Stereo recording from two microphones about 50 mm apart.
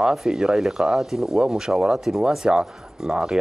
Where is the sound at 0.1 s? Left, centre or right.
Centre.